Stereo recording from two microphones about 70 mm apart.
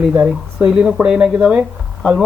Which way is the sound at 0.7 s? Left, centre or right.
Centre.